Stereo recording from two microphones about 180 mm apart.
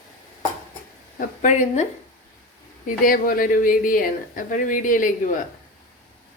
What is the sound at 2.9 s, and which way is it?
Speech, 50° left (ahead or behind).